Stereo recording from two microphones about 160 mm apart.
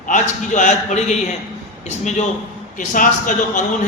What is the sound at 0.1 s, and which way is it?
A man's voice, 50° left (ahead or behind).